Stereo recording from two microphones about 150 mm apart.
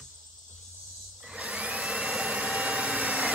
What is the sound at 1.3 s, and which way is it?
Vacuum cleaner, 10° right (ahead or behind).